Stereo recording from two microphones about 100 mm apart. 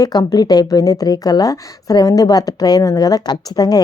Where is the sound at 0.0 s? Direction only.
40° left (ahead or behind).